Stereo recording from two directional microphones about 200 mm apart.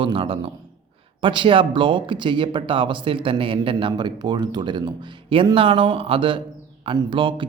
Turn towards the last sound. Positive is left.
turn(degrees=-25)  # may be behind; listen again after turning